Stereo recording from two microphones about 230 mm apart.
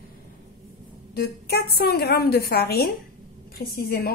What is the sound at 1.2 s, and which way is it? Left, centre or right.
A woman's voice, left.